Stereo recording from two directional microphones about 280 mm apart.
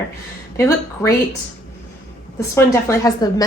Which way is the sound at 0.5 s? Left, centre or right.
Centre.